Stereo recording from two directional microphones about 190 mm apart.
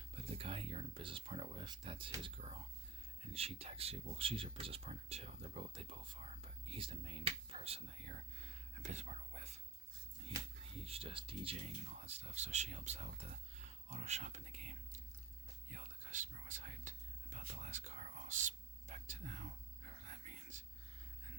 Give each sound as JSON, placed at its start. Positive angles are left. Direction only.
{"t": 0.3, "sound": "speech", "side_deg": -30}
{"t": 10.8, "sound": "speech", "side_deg": -30}
{"t": 15.7, "sound": "whispering", "side_deg": -40}